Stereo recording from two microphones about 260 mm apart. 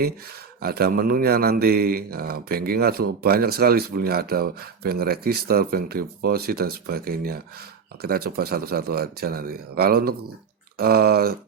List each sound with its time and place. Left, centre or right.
0.6 s speech: right